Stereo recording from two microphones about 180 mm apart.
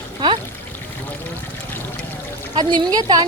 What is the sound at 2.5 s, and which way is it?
Speech, 25° right (ahead or behind).